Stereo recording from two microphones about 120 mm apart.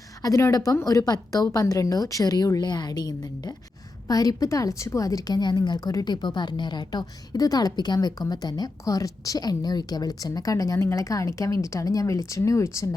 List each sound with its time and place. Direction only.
0.2 s a woman's voice: 25° left (ahead or behind)